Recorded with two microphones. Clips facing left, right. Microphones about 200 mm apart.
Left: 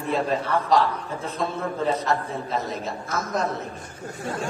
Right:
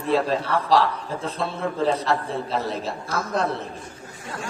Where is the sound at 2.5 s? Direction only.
30° right (ahead or behind).